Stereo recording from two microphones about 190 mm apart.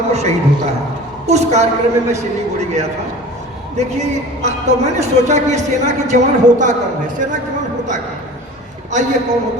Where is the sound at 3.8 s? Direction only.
35° right (ahead or behind).